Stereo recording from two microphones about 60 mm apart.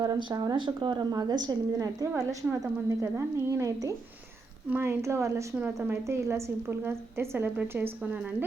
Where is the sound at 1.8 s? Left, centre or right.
Right.